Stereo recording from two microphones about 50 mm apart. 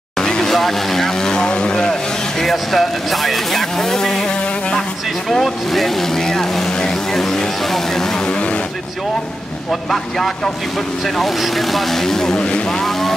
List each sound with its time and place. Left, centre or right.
0.2 s vehicle: centre
4.3 s music: centre
5.3 s speech: centre; by 8.6 s left
9.7 s speech: centre